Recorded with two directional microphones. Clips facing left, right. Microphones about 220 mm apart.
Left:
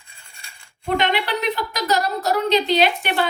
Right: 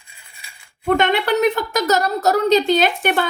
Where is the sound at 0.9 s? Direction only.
50° right (ahead or behind).